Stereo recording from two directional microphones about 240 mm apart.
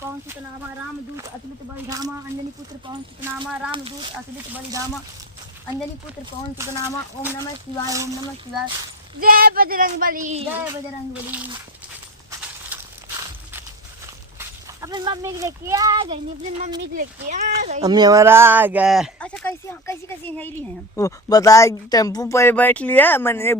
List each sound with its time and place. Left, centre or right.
3.7 s speech: right
6.7 s speech: centre
7.9 s speech: centre
9.2 s speech: right
11.1 s a child's voice: centre
12.7 s walk: centre
14.3 s speech: centre